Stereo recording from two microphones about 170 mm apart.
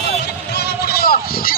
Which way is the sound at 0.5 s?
70° left (ahead or behind).